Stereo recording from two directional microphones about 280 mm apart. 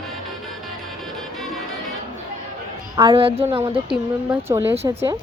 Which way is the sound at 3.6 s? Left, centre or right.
Centre.